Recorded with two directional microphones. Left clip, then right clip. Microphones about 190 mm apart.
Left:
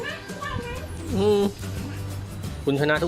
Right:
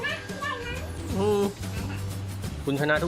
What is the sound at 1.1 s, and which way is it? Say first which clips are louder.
Speech: left 4 dB; 20° left (ahead or behind).